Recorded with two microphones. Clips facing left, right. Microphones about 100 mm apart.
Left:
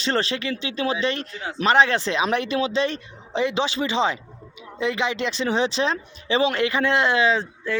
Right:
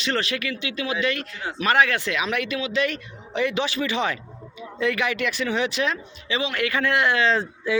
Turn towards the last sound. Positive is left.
turn(degrees=-5)  # may be behind; listen again after turning